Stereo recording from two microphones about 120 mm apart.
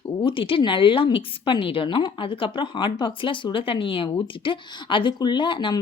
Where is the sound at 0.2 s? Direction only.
45° left (ahead or behind).